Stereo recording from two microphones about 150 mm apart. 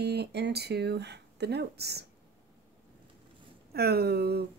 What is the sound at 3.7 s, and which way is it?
Speech, 90° right.